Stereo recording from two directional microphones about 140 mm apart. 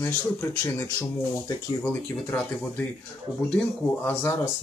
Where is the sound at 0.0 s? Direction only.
15° left (ahead or behind).